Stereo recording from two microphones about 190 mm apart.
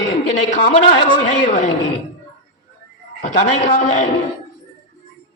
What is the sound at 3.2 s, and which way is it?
Speech, 40° left (ahead or behind).